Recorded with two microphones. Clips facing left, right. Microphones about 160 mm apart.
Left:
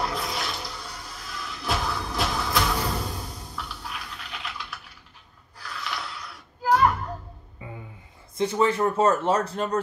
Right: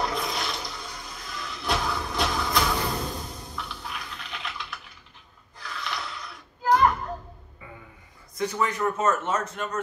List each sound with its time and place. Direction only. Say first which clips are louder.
0.0 s toilet flush: even; centre (ahead or behind)
3.5 s computer keyboard: even; centre (ahead or behind)
5.6 s a sound: even; centre (ahead or behind)
7.6 s music: left 5 dB; 25° left (ahead or behind)
8.4 s speech: left 4 dB; 25° left (ahead or behind)